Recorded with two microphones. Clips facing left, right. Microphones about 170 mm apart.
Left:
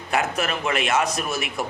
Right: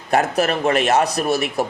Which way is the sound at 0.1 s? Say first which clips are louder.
Right 6 dB; 40° right (ahead or behind).